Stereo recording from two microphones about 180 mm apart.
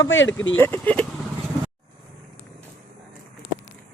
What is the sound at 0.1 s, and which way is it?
Speech, 90° left.